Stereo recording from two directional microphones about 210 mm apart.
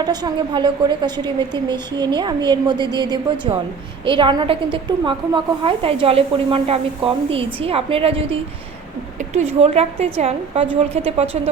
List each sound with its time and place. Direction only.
0.0 s a woman's voice: 20° right (ahead or behind)